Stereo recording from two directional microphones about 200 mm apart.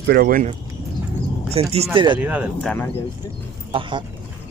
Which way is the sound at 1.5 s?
30° right (ahead or behind).